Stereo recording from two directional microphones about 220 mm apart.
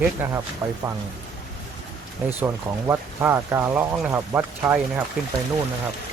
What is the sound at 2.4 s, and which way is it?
Speech, 10° right (ahead or behind).